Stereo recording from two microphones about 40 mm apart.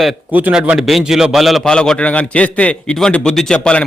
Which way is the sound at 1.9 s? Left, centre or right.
Left.